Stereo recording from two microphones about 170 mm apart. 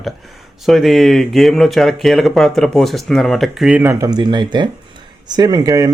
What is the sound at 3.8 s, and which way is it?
Speech, 20° right (ahead or behind).